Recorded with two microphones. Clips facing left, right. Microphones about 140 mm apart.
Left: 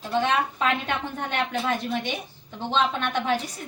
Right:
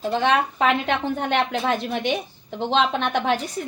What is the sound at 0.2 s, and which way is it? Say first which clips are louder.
A woman's voice: right 2 dB; 75° right (ahead or behind).